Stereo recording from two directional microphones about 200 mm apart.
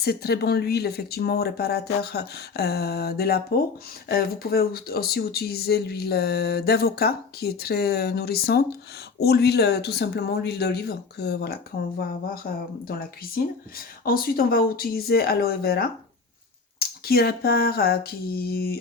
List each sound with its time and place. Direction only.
0.0 s speech: 50° left (ahead or behind)